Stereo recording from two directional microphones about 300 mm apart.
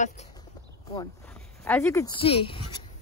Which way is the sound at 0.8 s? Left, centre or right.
Centre.